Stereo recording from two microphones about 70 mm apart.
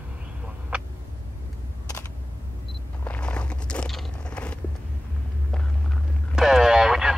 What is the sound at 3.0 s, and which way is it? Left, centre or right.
Biting, centre.